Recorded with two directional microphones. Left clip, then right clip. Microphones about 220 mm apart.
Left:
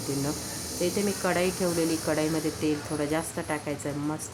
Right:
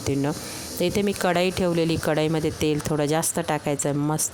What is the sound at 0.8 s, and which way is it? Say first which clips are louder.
A woman's voice: right 5 dB; 45° right (ahead or behind).